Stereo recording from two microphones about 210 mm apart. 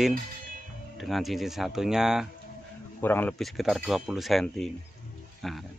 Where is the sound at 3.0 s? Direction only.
10° left (ahead or behind).